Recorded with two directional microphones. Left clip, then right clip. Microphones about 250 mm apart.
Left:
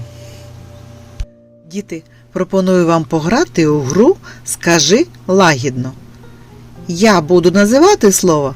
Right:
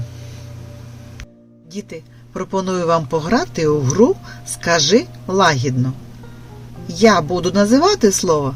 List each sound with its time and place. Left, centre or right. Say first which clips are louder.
1.7 s speech: left 5 dB; left